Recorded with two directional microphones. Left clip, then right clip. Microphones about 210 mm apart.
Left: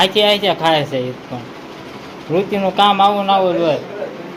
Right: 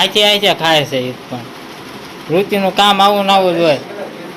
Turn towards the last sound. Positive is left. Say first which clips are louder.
# right 3 dB
turn(degrees=-25)  # may be behind; listen again after turning